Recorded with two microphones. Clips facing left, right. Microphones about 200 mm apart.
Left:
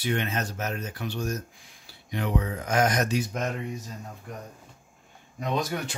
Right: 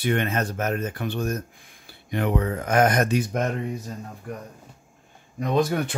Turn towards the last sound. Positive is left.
turn(degrees=-55)  # may be behind; listen again after turning